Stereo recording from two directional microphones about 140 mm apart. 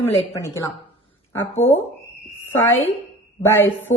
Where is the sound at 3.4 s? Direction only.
15° left (ahead or behind).